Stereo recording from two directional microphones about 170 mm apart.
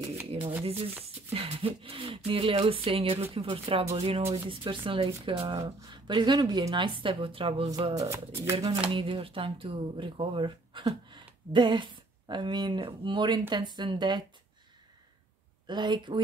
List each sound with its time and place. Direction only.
0.7 s speech: 35° right (ahead or behind)
7.9 s speech: 20° right (ahead or behind)
8.9 s speech: 30° right (ahead or behind)
15.6 s speech: 25° right (ahead or behind)